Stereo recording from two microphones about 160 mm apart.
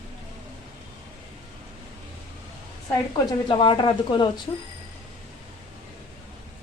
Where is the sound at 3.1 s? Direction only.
25° left (ahead or behind).